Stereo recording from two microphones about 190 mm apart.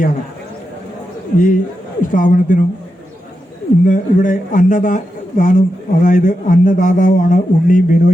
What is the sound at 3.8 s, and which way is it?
A man's voice, 45° left (ahead or behind).